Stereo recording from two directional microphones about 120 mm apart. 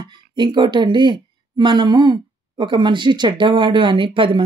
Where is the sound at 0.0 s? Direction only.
40° right (ahead or behind).